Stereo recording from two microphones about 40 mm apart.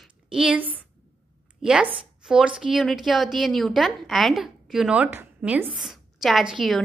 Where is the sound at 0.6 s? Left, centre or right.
Right.